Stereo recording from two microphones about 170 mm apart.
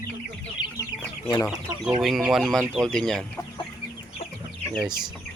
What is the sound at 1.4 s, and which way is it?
Speech, centre (ahead or behind).